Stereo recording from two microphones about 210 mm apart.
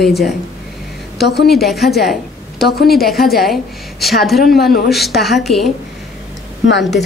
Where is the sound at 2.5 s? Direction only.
50° left (ahead or behind).